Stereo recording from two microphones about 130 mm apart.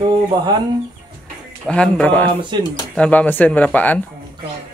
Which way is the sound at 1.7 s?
10° left (ahead or behind).